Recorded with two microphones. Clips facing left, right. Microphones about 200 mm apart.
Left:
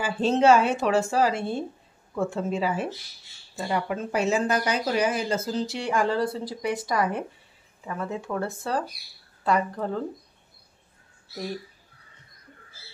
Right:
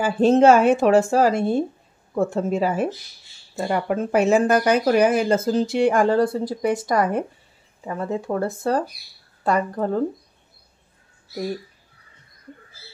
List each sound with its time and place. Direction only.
0.0 s speech: 50° right (ahead or behind)
7.8 s speech: 35° right (ahead or behind)